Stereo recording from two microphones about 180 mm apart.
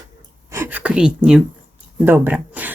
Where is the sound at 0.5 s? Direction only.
10° right (ahead or behind).